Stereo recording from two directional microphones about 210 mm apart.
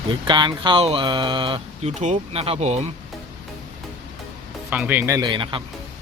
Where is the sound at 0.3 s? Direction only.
20° right (ahead or behind).